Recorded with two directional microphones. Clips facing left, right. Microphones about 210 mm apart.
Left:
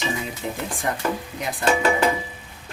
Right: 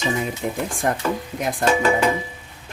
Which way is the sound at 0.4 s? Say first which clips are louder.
Right 3 dB; 50° right (ahead or behind).